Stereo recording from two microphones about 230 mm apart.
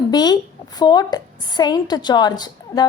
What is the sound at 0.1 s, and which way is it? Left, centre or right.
A woman's voice, centre.